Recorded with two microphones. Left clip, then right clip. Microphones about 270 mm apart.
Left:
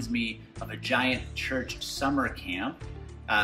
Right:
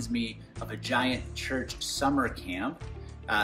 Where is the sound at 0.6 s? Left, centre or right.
Centre.